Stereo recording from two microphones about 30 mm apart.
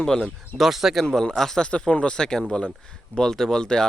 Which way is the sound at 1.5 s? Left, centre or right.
Left.